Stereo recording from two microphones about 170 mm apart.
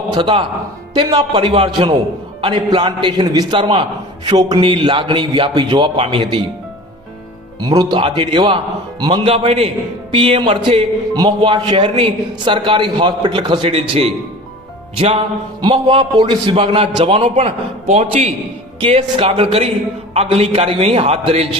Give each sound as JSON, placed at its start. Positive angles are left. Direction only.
{"t": 0.1, "sound": "a man's voice", "side_deg": -30}
{"t": 7.6, "sound": "a man's voice", "side_deg": -25}
{"t": 17.3, "sound": "a man's voice", "side_deg": -40}